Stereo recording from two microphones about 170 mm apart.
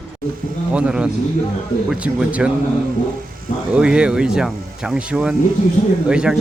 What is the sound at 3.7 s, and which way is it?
Speech, 5° right (ahead or behind).